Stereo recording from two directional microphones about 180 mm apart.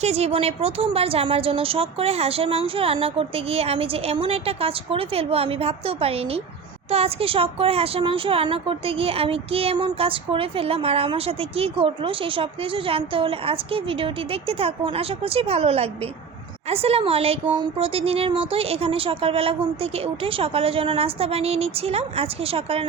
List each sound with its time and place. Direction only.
0.0 s speech: 35° right (ahead or behind)